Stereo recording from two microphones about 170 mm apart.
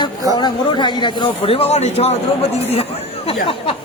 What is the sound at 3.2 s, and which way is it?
Speech, 35° left (ahead or behind).